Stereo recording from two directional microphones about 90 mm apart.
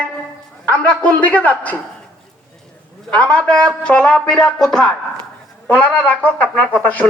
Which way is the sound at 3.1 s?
10° left (ahead or behind).